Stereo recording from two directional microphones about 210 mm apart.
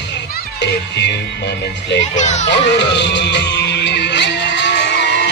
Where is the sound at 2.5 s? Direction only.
55° left (ahead or behind).